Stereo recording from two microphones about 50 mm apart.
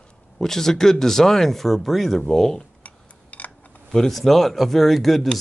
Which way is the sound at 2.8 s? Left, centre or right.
Left.